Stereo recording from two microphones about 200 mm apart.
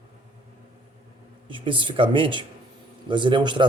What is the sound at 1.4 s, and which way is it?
A man's voice, 25° right (ahead or behind).